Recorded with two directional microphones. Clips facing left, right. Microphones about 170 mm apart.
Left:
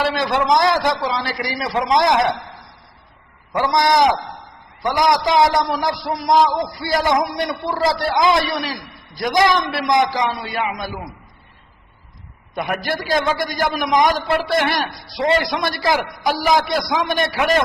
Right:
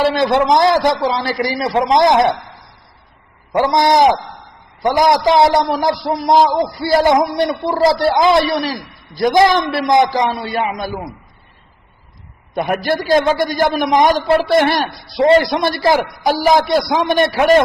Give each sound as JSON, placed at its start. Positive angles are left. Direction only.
{"t": 0.2, "sound": "a man's voice", "side_deg": -30}
{"t": 3.5, "sound": "a man's voice", "side_deg": -25}
{"t": 12.5, "sound": "a man's voice", "side_deg": -30}